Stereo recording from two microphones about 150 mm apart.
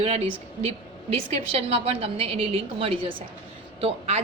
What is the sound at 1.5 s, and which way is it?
A woman's voice, 40° right (ahead or behind).